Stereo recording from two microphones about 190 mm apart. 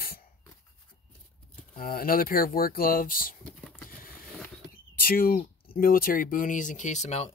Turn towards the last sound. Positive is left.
turn(degrees=35)  # may be behind; listen again after turning